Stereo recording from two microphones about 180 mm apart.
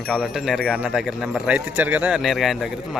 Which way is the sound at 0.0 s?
Centre (ahead or behind).